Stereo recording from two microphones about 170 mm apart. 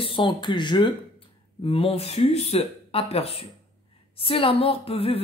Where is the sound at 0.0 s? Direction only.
30° left (ahead or behind).